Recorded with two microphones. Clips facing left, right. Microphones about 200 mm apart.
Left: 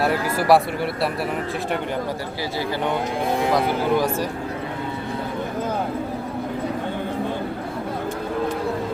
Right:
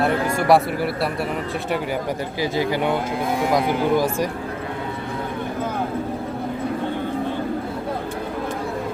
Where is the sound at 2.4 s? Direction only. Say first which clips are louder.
Right 5 dB; 15° right (ahead or behind).